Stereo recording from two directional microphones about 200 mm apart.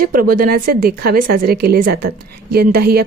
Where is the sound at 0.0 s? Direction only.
45° right (ahead or behind).